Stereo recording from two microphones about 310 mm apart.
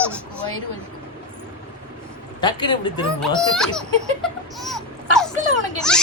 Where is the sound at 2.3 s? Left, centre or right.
Centre.